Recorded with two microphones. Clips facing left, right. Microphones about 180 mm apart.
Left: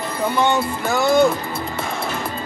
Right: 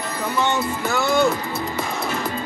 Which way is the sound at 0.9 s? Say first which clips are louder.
Left 4 dB; 15° left (ahead or behind).